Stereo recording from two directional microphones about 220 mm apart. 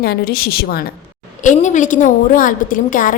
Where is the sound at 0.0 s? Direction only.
45° left (ahead or behind).